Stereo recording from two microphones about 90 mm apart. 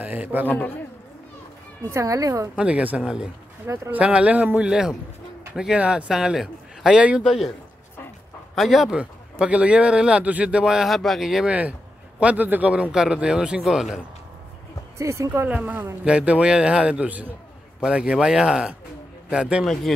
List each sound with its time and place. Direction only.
0.0 s a man's voice: 20° right (ahead or behind)
0.5 s a man's voice: 20° left (ahead or behind)
1.9 s speech: 35° right (ahead or behind)
2.5 s a man's voice: 15° right (ahead or behind)
3.6 s speech: 30° right (ahead or behind)
3.9 s a man's voice: 15° right (ahead or behind)
8.5 s a man's voice: centre (ahead or behind)
8.9 s a man's voice: 15° right (ahead or behind)
12.2 s a man's voice: 15° right (ahead or behind)
15.0 s speech: 35° right (ahead or behind)
15.4 s a man's voice: 15° right (ahead or behind)
19.6 s a man's voice: centre (ahead or behind)